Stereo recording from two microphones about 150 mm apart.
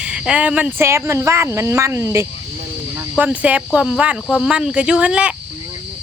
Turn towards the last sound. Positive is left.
turn(degrees=-10)  # may be behind; listen again after turning